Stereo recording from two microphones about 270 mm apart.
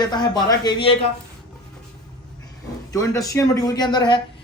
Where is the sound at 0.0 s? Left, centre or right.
Centre.